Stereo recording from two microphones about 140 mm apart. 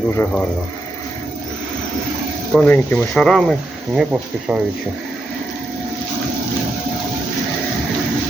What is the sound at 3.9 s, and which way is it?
Speech, 5° right (ahead or behind).